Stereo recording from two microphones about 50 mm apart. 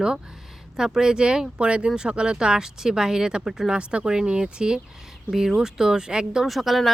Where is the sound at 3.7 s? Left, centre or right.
Centre.